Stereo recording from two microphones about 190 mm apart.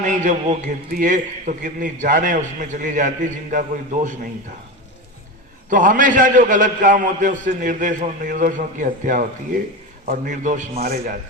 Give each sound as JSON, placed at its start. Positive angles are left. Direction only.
{"t": 0.0, "sound": "a man's voice", "side_deg": -40}
{"t": 5.7, "sound": "a man's voice", "side_deg": -45}